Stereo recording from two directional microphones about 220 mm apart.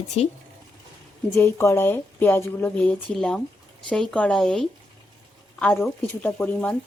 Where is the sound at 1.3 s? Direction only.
10° left (ahead or behind).